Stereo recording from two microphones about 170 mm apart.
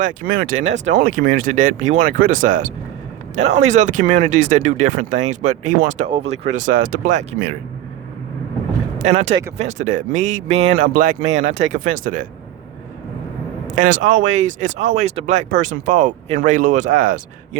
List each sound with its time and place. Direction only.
0.0 s speech: 55° right (ahead or behind)
6.1 s speech: 35° right (ahead or behind); by 7.5 s 50° right (ahead or behind)
9.0 s speech: 40° right (ahead or behind)
13.7 s speech: 50° right (ahead or behind)